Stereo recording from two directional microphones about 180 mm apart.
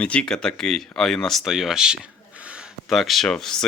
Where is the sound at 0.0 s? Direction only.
5° left (ahead or behind).